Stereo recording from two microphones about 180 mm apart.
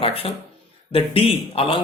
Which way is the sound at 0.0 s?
30° left (ahead or behind).